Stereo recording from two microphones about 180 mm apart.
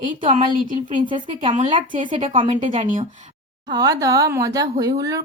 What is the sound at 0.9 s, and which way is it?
Speech, 30° right (ahead or behind).